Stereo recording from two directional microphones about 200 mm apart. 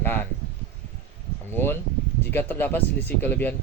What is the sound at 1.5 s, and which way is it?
A man's voice, 10° left (ahead or behind).